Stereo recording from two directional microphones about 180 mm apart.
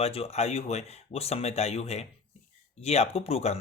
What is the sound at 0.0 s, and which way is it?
Speech, 35° left (ahead or behind).